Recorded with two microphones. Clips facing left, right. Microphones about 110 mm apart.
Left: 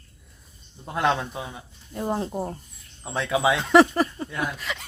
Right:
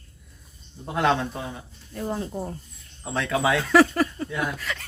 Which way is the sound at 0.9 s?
10° left (ahead or behind).